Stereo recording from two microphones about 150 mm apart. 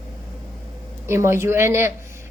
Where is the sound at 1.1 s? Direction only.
15° right (ahead or behind).